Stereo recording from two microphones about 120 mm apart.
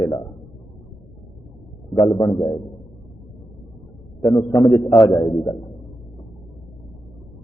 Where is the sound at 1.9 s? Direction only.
35° left (ahead or behind).